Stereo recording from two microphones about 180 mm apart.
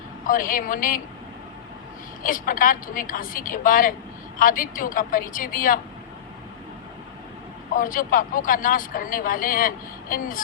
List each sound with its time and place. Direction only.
0.3 s speech: 50° left (ahead or behind)
2.2 s speech: 50° left (ahead or behind)
7.8 s speech: 50° left (ahead or behind)